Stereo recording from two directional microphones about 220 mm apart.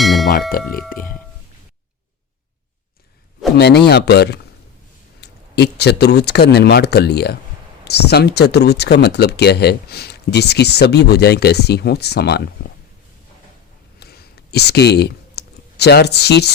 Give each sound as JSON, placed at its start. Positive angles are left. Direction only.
{"t": 0.0, "sound": "a sound", "side_deg": 0}
{"t": 0.5, "sound": "speech", "side_deg": 40}
{"t": 3.6, "sound": "speech", "side_deg": 50}
{"t": 14.0, "sound": "clicking", "side_deg": 45}